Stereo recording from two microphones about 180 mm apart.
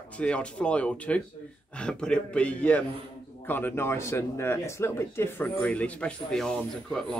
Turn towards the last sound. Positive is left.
turn(degrees=5)  # may be behind; listen again after turning